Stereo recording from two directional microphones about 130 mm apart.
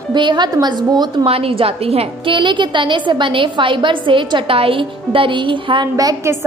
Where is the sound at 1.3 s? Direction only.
45° right (ahead or behind).